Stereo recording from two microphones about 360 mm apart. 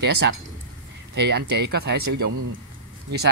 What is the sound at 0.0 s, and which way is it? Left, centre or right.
Speech, right.